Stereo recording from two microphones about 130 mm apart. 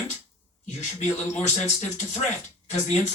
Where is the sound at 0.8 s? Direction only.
60° left (ahead or behind).